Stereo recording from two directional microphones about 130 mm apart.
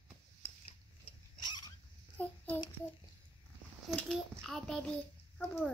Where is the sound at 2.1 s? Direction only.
15° left (ahead or behind).